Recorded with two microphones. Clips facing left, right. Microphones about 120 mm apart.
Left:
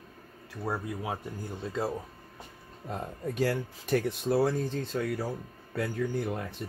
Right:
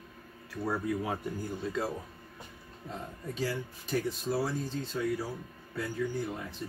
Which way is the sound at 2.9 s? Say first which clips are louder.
Left 5 dB; 60° left (ahead or behind).